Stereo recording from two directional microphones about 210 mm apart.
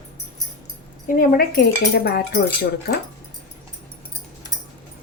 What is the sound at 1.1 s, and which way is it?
Speech, 45° left (ahead or behind).